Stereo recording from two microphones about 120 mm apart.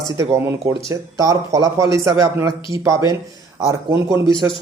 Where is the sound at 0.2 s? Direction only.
20° right (ahead or behind).